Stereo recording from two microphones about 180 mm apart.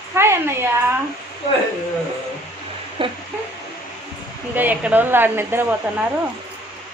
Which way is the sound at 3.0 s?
30° right (ahead or behind).